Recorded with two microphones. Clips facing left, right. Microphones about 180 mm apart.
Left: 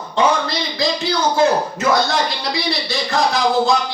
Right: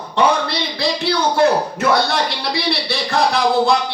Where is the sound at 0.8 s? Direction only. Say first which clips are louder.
Right 1 dB; 60° right (ahead or behind).